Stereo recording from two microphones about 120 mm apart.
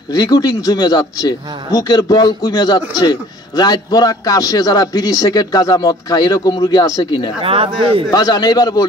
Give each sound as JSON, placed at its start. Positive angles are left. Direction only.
{"t": 0.1, "sound": "a man's voice", "side_deg": 30}
{"t": 7.4, "sound": "speech", "side_deg": -50}
{"t": 8.1, "sound": "a man's voice", "side_deg": 35}